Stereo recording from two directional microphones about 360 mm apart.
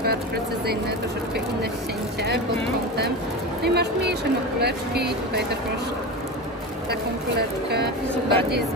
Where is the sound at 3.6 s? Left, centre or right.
Right.